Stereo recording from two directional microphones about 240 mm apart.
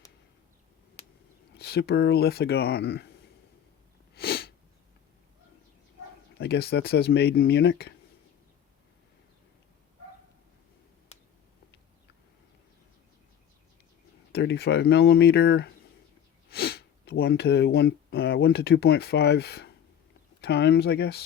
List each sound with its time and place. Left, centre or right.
1.5 s speech: left
4.1 s sneeze: left
6.3 s speech: left
11.1 s a sound: left
14.3 s speech: left